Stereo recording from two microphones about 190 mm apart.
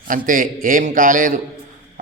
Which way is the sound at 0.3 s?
45° right (ahead or behind).